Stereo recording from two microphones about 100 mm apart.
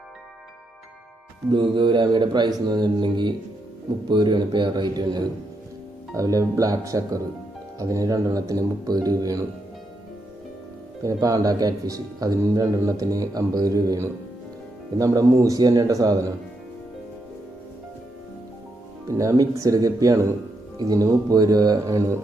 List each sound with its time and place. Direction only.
1.5 s speech: 50° right (ahead or behind)
6.1 s speech: 35° right (ahead or behind)
11.0 s speech: 35° right (ahead or behind)
19.0 s speech: 30° right (ahead or behind)